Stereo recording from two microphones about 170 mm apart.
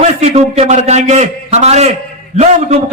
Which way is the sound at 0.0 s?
40° right (ahead or behind).